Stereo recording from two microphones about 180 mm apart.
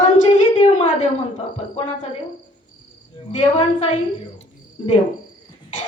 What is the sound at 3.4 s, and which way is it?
Speech, 25° left (ahead or behind).